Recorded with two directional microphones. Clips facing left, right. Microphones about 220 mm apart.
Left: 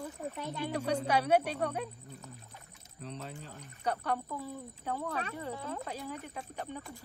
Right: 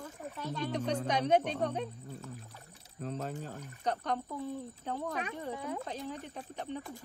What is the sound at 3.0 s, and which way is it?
Speech, 45° right (ahead or behind).